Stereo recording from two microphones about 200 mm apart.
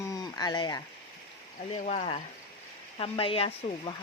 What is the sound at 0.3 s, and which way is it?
Speech, 20° left (ahead or behind).